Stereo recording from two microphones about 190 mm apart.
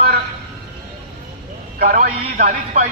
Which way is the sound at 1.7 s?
45° right (ahead or behind).